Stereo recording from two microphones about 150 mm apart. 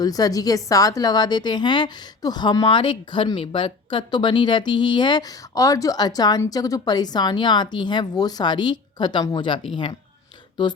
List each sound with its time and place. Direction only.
0.0 s a woman's voice: 25° left (ahead or behind)